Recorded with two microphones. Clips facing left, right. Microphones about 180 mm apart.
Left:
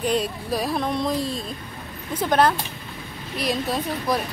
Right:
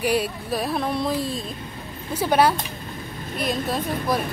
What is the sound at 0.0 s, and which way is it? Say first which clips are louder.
A woman's voice: right 1 dB; 5° right (ahead or behind).